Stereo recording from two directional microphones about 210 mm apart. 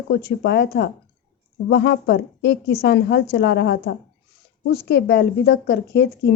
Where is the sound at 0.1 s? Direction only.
50° left (ahead or behind).